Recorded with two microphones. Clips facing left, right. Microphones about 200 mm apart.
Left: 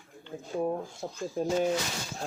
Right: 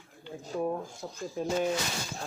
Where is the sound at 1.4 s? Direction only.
45° left (ahead or behind).